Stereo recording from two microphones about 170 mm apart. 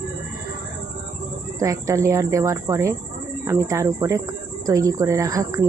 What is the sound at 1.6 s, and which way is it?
A woman's voice, 20° right (ahead or behind).